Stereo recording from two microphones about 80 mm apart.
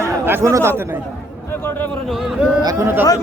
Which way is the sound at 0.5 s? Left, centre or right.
Right.